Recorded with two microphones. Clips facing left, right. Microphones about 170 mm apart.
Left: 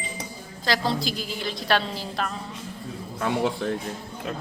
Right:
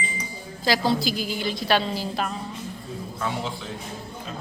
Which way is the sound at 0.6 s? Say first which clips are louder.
Right 3 dB; 5° right (ahead or behind).